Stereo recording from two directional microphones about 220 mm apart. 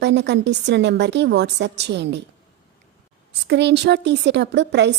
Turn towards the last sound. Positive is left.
turn(degrees=-50)  # may be behind; listen again after turning